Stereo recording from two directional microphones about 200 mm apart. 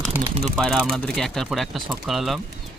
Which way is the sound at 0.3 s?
30° right (ahead or behind).